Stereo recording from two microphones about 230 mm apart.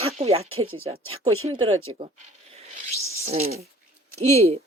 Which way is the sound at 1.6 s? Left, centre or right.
Right.